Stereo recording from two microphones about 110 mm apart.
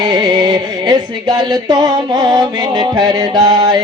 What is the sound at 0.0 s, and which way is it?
Music, 40° right (ahead or behind).